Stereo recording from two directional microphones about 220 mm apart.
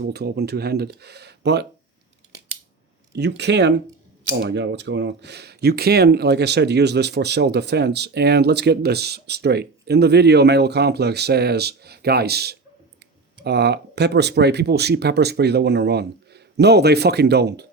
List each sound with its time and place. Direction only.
0.0 s speech: 45° right (ahead or behind)
3.1 s speech: 50° right (ahead or behind)